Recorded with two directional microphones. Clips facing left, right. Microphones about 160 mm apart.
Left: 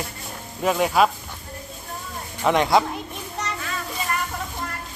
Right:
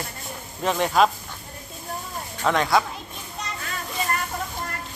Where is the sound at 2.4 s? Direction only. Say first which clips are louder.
Left 3 dB; 20° left (ahead or behind).